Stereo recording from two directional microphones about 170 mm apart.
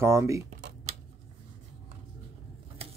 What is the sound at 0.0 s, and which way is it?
Speech, 15° right (ahead or behind).